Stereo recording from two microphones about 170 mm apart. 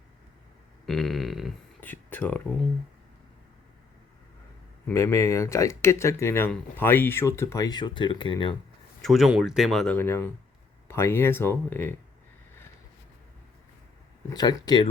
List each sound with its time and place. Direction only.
0.9 s burping: centre (ahead or behind)
1.8 s speech: 10° left (ahead or behind)
4.9 s speech: 15° left (ahead or behind)
9.0 s speech: centre (ahead or behind)
14.3 s speech: 25° left (ahead or behind)